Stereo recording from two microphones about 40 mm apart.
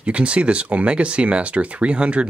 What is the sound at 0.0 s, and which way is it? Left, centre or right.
Speech, right.